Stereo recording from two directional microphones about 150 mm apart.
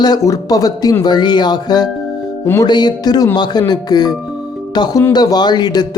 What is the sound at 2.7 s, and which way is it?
A man's voice, 30° left (ahead or behind).